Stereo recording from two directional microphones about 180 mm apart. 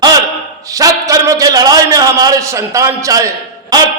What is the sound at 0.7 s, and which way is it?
A man's voice, 20° right (ahead or behind).